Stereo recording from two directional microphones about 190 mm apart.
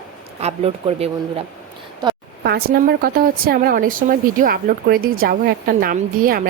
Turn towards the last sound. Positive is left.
turn(degrees=-50)  # may be behind; listen again after turning